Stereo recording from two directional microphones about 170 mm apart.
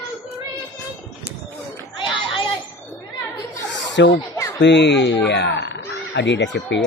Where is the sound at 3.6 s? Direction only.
90° left.